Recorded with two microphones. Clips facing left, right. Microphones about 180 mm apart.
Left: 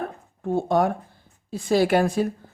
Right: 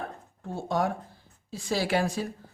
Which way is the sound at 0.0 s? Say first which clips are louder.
Left 8 dB; 55° left (ahead or behind).